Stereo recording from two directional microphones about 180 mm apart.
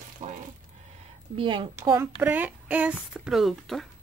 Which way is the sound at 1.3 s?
30° right (ahead or behind).